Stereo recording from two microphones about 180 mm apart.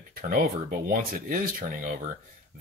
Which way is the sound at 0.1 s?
55° right (ahead or behind).